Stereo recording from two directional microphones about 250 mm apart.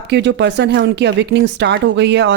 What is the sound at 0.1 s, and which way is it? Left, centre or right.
Speech, right.